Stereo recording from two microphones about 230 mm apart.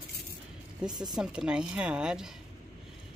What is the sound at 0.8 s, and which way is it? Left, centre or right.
Speech, centre.